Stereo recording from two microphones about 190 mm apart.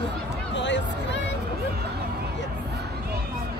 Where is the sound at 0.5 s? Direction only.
70° left (ahead or behind).